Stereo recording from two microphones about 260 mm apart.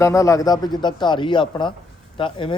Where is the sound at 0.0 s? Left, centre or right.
Centre.